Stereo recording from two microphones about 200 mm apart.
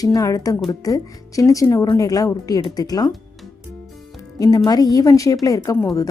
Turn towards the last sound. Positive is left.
turn(degrees=15)  # may be behind; listen again after turning